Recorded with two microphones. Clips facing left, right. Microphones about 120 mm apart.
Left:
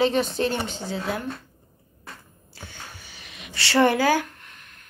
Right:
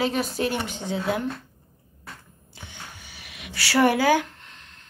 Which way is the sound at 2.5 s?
15° right (ahead or behind).